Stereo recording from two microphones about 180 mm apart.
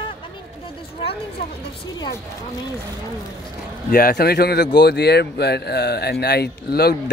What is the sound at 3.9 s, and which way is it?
Speech, 55° left (ahead or behind).